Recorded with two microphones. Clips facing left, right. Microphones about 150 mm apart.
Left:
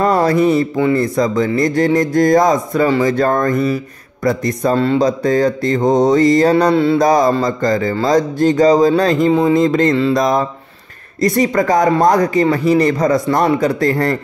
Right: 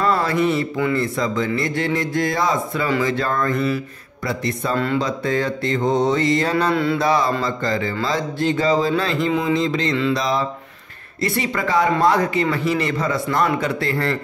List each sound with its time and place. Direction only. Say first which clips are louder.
0.0 s mantra: left 6 dB; 40° left (ahead or behind)
4.2 s speech: left 8 dB; 45° left (ahead or behind)
4.7 s mantra: left 7 dB; 35° left (ahead or behind); by 9.9 s 50° left (ahead or behind)
9.9 s speech: left 6 dB; 40° left (ahead or behind)
11.1 s mantra: left 9 dB; 40° left (ahead or behind)